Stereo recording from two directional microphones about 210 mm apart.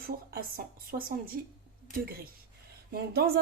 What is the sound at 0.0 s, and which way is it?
Speech, 45° right (ahead or behind).